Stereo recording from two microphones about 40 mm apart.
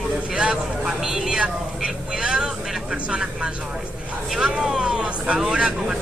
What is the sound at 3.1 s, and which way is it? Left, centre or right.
Speech, right.